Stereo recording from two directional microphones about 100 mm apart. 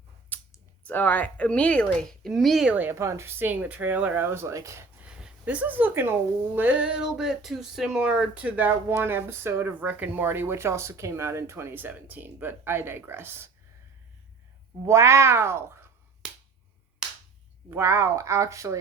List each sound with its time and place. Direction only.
0.3 s a sound: 15° left (ahead or behind)
0.9 s speech: 15° left (ahead or behind); by 2.6 s centre (ahead or behind)
2.6 s speech: 15° right (ahead or behind)
2.9 s speech: 30° right (ahead or behind)
5.0 s speech: 10° right (ahead or behind)
14.8 s speech: 30° right (ahead or behind)
17.0 s finger snapping: 5° right (ahead or behind)
17.7 s speech: 25° right (ahead or behind)